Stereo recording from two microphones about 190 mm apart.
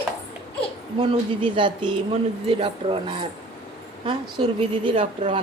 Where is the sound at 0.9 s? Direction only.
25° right (ahead or behind).